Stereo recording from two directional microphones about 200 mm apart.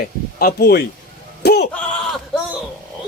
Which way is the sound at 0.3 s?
50° left (ahead or behind).